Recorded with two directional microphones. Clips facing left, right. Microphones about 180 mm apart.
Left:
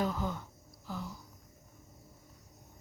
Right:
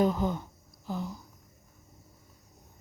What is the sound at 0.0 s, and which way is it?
A woman's voice, 20° right (ahead or behind).